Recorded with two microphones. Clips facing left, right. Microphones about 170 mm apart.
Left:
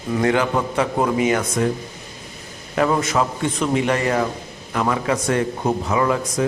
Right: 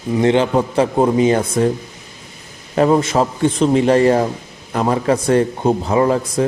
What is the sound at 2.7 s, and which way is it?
Speech, 30° right (ahead or behind).